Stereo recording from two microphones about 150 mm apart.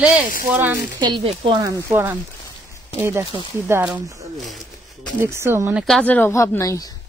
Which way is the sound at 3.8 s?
5° right (ahead or behind).